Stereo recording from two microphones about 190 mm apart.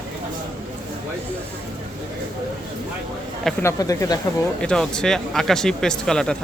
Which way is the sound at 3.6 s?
15° left (ahead or behind).